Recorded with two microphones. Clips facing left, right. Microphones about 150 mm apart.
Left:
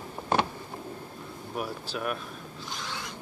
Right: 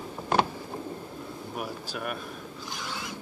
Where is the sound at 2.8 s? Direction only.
5° right (ahead or behind).